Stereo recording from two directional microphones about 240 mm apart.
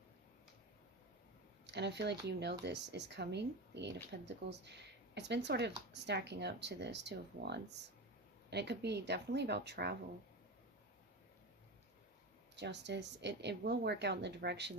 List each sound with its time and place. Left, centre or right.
1.6 s speech: right
12.5 s speech: right